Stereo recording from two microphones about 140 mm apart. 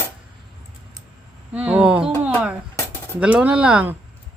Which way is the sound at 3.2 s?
10° right (ahead or behind).